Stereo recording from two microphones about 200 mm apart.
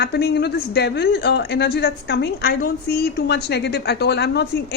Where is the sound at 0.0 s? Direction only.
55° left (ahead or behind).